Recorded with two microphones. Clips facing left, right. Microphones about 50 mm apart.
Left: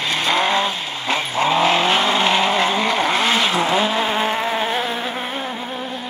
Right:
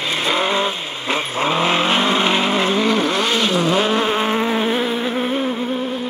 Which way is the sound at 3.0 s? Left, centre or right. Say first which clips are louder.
Left 1 dB; centre.